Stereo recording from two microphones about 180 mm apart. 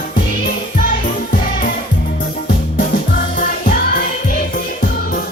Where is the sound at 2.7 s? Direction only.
50° left (ahead or behind).